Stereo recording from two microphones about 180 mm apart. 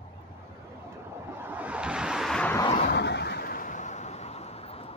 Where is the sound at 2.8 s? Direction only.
65° left (ahead or behind).